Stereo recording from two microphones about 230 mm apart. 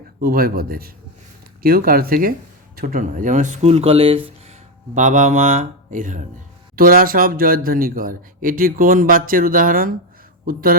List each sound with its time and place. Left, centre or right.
0.2 s speech: right